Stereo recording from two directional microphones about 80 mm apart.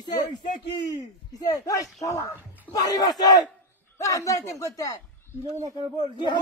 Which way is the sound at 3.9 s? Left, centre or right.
Left.